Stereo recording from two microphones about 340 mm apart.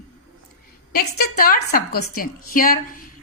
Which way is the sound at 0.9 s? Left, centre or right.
Left.